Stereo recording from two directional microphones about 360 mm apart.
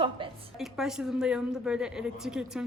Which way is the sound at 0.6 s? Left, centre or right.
Centre.